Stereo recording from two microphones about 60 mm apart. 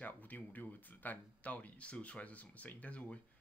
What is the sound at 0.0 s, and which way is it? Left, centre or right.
Speech, left.